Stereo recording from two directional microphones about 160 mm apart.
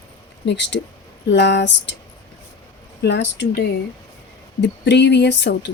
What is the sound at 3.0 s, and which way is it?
Speech, 90° left.